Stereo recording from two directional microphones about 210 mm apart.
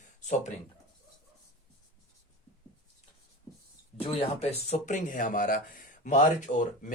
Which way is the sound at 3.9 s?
30° left (ahead or behind).